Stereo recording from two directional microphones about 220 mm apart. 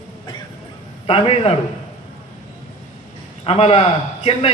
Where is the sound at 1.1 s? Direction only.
25° left (ahead or behind).